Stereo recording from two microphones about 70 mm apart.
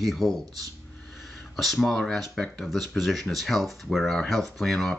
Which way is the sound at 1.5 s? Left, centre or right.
Centre.